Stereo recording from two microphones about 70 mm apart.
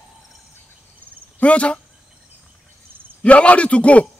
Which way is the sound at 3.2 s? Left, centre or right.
Centre.